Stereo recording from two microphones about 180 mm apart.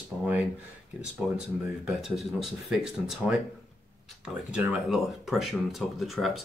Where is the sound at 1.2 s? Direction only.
Centre (ahead or behind).